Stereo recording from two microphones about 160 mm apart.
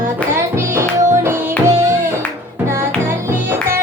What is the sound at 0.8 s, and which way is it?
Music, 15° right (ahead or behind).